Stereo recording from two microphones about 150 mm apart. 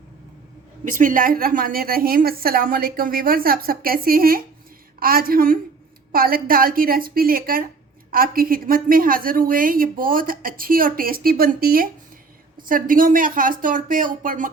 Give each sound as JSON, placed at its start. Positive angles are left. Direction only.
{"t": 0.9, "sound": "a woman's voice", "side_deg": -60}
{"t": 12.6, "sound": "speech", "side_deg": -65}